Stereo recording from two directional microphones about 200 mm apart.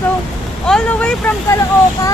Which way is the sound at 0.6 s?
5° left (ahead or behind).